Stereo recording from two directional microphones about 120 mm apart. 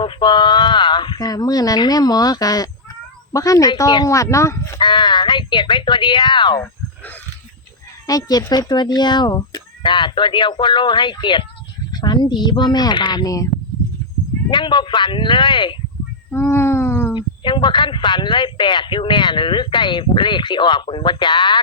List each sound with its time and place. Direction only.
0.0 s speech: 40° left (ahead or behind); by 4.8 s 25° left (ahead or behind)
4.8 s speech: 40° left (ahead or behind)
6.6 s a sound: 15° left (ahead or behind)
8.0 s speech: 30° left (ahead or behind)
14.5 s speech: 40° left (ahead or behind)
16.3 s a sound: 20° left (ahead or behind)
17.2 s speech: 40° left (ahead or behind)